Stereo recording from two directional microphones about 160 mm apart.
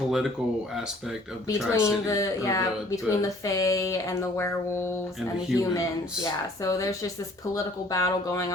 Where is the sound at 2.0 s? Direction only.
20° left (ahead or behind).